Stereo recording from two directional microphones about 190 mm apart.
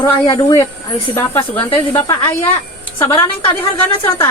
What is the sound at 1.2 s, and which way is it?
Speech, 15° left (ahead or behind).